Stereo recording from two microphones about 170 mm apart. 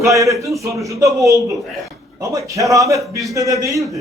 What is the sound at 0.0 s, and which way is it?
A man's voice, 20° right (ahead or behind).